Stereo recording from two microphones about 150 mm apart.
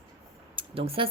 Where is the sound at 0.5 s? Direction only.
40° right (ahead or behind).